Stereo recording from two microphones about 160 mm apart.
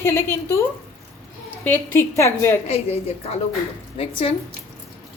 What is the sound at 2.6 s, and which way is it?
A woman's voice, 40° left (ahead or behind).